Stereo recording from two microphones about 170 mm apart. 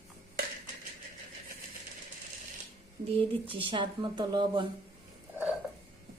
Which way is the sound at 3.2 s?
30° right (ahead or behind).